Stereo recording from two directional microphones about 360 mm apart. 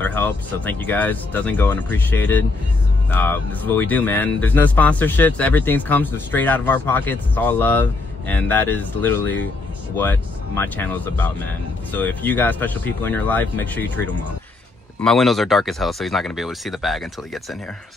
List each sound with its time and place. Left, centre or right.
0.0 s speech: centre